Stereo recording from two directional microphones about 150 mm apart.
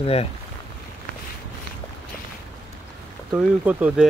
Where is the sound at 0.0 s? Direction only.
40° left (ahead or behind).